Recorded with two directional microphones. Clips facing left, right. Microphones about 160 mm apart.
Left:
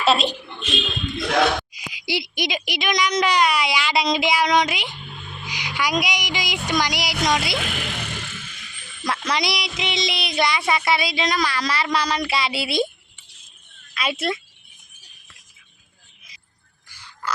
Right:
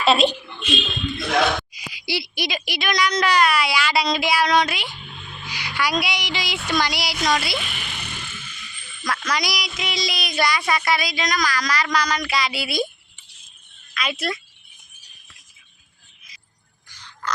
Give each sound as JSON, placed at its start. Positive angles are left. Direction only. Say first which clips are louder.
{"t": 0.0, "sound": "speech", "louder": "right 2 dB", "side_deg": 0}
{"t": 1.9, "sound": "a woman's voice", "louder": "left 1 dB", "side_deg": 15}
{"t": 7.6, "sound": "vehicle", "louder": "left 6 dB", "side_deg": 90}
{"t": 9.0, "sound": "speech", "louder": "left 1 dB", "side_deg": 25}
{"t": 13.9, "sound": "speech", "louder": "left 2 dB", "side_deg": 30}
{"t": 16.9, "sound": "frog", "louder": "even", "side_deg": 10}